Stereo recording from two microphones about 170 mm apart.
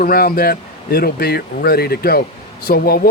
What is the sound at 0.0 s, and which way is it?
Speech, 60° left (ahead or behind).